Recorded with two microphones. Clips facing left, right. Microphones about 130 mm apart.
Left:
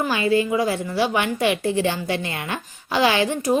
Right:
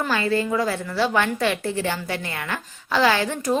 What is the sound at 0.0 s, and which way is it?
A woman's voice, 15° left (ahead or behind).